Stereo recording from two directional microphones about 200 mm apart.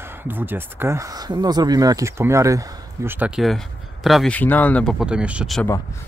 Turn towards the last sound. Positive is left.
turn(degrees=-5)  # may be behind; listen again after turning